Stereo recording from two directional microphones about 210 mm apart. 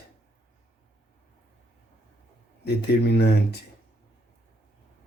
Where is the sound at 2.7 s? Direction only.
50° left (ahead or behind).